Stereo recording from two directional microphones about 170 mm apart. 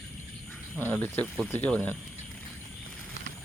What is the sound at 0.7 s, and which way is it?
Speech, 10° left (ahead or behind).